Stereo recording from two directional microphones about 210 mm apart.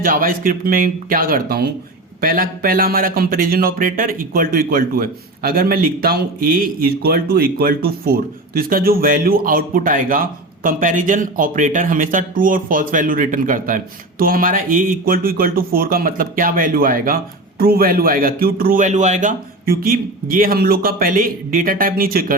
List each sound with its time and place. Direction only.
0.0 s speech: 45° right (ahead or behind)